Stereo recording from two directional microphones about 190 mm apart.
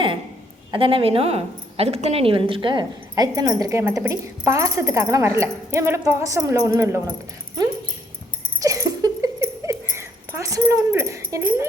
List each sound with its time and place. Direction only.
0.7 s a woman's voice: 25° right (ahead or behind)
8.5 s a sound: 15° right (ahead or behind)
9.9 s speech: 15° right (ahead or behind)